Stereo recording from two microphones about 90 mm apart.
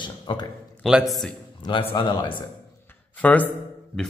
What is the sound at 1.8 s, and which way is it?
Speech, 90° left.